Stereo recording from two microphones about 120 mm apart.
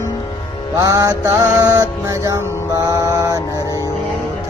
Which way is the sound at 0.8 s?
30° right (ahead or behind).